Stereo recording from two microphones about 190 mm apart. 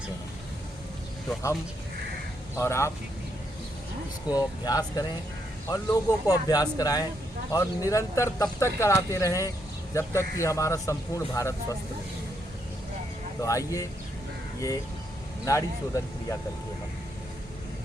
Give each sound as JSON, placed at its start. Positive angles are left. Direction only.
{"t": 2.6, "sound": "speech", "side_deg": 15}
{"t": 4.3, "sound": "speech", "side_deg": 20}
{"t": 13.4, "sound": "speech", "side_deg": 15}
{"t": 15.4, "sound": "speech", "side_deg": 15}